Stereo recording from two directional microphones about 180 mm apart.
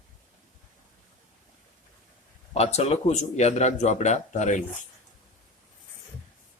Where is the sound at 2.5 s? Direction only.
35° left (ahead or behind).